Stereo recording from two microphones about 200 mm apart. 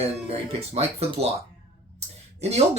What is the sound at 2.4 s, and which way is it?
Speech, 30° right (ahead or behind).